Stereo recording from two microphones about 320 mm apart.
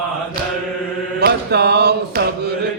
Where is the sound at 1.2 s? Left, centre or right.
Right.